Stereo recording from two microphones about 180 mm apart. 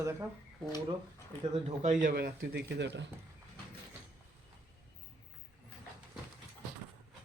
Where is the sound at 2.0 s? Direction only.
55° right (ahead or behind); by 3.0 s 75° right (ahead or behind).